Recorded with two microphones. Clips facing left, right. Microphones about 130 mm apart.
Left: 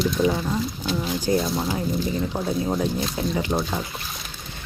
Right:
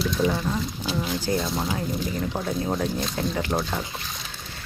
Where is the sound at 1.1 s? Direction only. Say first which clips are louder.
Left 5 dB; 15° left (ahead or behind).